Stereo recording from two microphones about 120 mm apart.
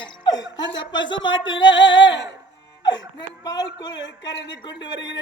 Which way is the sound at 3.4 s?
35° left (ahead or behind).